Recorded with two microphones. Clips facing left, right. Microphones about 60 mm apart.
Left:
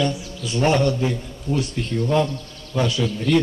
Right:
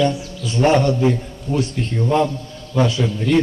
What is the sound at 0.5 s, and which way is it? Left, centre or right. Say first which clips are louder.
A man's voice: right 3 dB; right.